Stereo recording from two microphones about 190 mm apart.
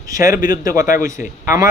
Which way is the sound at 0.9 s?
45° left (ahead or behind).